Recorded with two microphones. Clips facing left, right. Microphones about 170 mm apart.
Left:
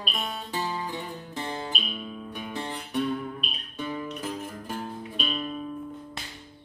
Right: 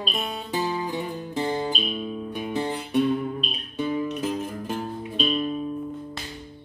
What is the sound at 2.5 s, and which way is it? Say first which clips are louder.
Music: right 8 dB; 5° right (ahead or behind).